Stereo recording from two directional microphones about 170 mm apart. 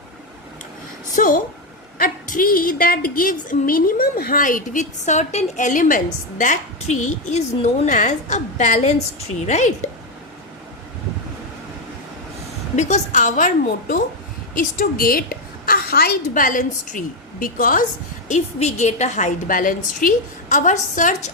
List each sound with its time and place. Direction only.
1.1 s a woman's voice: 50° left (ahead or behind)
12.7 s a woman's voice: 45° left (ahead or behind)